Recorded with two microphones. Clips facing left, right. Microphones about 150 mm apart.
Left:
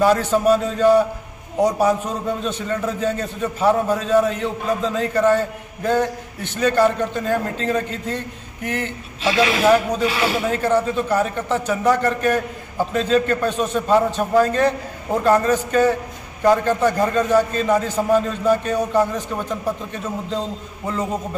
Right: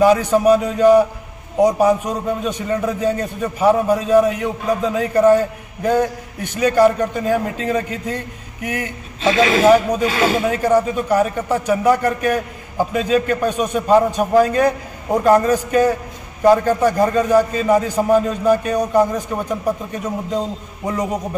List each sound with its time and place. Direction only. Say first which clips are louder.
0.0 s a man's voice: right 3 dB; 10° right (ahead or behind)
10.1 s speech: right 4 dB; 45° right (ahead or behind)
10.5 s a man's voice: right 3 dB; 10° right (ahead or behind)